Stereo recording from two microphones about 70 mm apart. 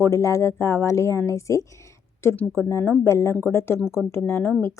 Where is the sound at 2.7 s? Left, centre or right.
Left.